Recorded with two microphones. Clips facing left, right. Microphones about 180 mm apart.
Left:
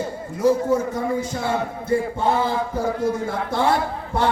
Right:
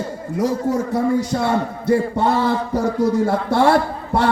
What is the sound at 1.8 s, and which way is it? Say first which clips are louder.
A man's voice: right 4 dB; 70° right (ahead or behind).